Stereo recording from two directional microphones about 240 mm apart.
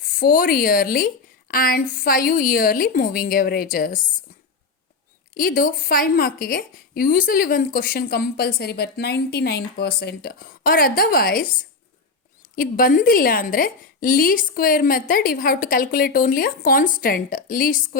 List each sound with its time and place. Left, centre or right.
0.2 s a woman's voice: left
5.3 s a woman's voice: left